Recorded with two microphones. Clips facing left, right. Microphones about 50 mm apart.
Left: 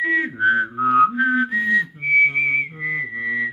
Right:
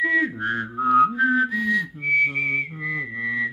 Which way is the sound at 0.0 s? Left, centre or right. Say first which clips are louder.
Left 3 dB; centre.